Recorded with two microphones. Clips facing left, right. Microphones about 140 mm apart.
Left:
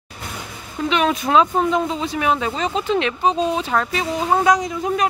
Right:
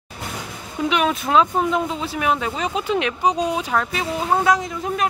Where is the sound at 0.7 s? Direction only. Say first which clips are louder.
Left 1 dB; 10° right (ahead or behind).